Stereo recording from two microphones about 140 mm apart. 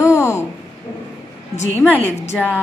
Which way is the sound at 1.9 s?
10° left (ahead or behind).